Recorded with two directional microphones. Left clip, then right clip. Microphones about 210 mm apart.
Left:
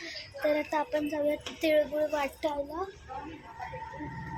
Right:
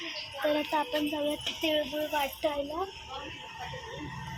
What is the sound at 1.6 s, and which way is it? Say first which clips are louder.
Speech: left 5 dB; 10° left (ahead or behind).